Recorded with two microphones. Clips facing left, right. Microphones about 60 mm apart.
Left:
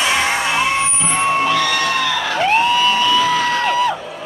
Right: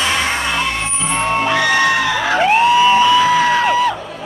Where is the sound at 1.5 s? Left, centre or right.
Right.